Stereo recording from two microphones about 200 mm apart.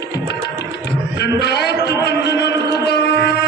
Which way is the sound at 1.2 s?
55° left (ahead or behind).